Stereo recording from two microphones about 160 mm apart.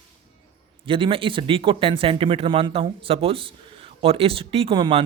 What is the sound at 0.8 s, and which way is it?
Speech, 35° right (ahead or behind).